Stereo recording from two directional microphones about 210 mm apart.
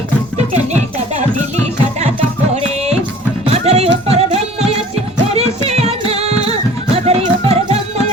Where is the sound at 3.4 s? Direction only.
30° right (ahead or behind).